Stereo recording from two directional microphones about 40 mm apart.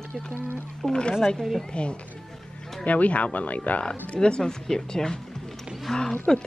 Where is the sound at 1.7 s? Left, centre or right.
Left.